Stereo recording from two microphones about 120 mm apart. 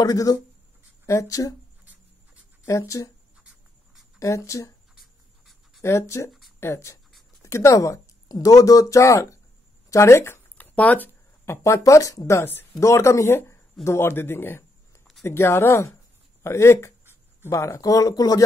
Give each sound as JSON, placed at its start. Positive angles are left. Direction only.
{"t": 0.0, "sound": "speech", "side_deg": 30}
{"t": 2.6, "sound": "speech", "side_deg": 25}
{"t": 4.2, "sound": "speech", "side_deg": 25}
{"t": 5.8, "sound": "speech", "side_deg": 25}
{"t": 17.0, "sound": "a sound", "side_deg": -20}
{"t": 17.5, "sound": "speech", "side_deg": 25}